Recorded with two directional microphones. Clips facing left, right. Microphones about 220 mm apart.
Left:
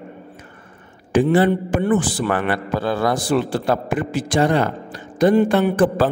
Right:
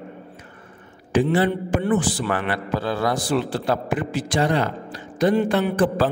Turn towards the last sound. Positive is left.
turn(degrees=50)  # may be behind; listen again after turning